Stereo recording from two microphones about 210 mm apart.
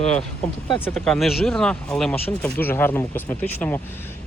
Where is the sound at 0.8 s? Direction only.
5° left (ahead or behind).